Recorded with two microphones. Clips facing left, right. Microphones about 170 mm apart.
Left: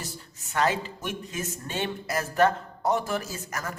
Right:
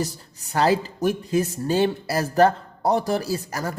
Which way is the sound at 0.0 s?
40° right (ahead or behind).